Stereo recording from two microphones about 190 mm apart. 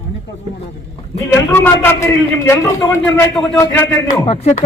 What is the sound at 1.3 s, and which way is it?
A man's voice, 10° left (ahead or behind).